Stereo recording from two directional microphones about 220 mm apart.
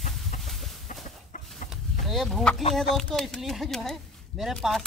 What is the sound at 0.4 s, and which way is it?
Chicken, centre (ahead or behind).